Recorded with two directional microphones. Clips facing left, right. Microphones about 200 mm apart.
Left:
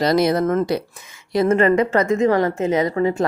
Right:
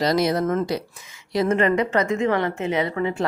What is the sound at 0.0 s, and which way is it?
A woman's voice, 55° left (ahead or behind).